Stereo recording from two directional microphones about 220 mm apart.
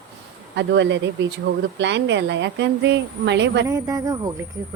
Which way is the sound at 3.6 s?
15° right (ahead or behind).